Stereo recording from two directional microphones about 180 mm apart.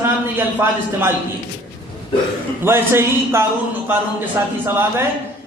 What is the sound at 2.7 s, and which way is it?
Speech, 15° right (ahead or behind).